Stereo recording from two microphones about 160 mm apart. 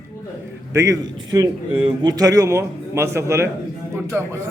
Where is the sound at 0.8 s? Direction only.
20° right (ahead or behind).